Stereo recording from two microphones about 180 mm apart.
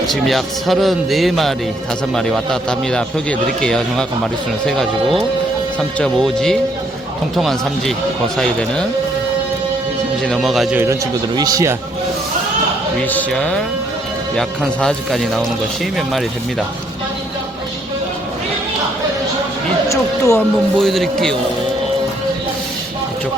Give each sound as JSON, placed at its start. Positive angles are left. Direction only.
{"t": 0.1, "sound": "a man's voice", "side_deg": 0}
{"t": 10.2, "sound": "a man's voice", "side_deg": 0}
{"t": 11.3, "sound": "a man's voice", "side_deg": -20}
{"t": 13.1, "sound": "a man's voice", "side_deg": 10}
{"t": 19.9, "sound": "a sound", "side_deg": 15}
{"t": 20.7, "sound": "a man's voice", "side_deg": 0}